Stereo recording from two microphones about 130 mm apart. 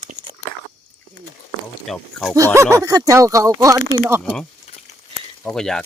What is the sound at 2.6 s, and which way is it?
Speech, 20° right (ahead or behind).